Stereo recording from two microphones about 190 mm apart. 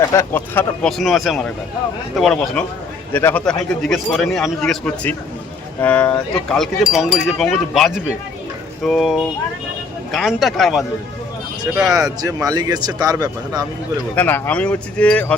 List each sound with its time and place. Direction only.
0.1 s speech: 15° left (ahead or behind)
11.6 s speech: 20° right (ahead or behind)
14.2 s speech: 10° left (ahead or behind)